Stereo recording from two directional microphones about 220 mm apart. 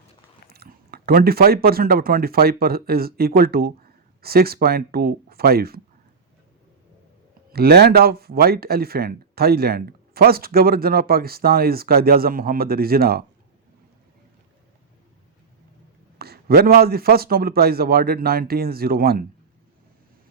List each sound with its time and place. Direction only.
0.5 s speech: 45° right (ahead or behind)
7.5 s speech: 45° right (ahead or behind)
16.1 s speech: 45° right (ahead or behind)